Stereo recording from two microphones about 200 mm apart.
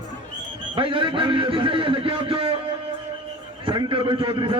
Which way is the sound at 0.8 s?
25° right (ahead or behind).